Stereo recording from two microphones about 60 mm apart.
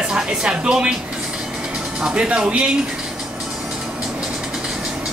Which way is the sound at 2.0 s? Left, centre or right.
Centre.